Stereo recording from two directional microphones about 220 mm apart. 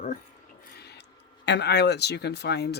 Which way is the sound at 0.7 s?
50° left (ahead or behind).